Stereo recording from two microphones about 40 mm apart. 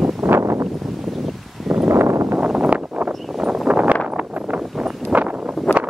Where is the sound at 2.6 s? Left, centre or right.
Right.